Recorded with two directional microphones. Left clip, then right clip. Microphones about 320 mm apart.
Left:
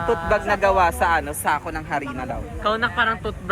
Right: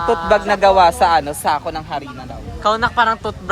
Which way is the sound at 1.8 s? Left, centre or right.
Centre.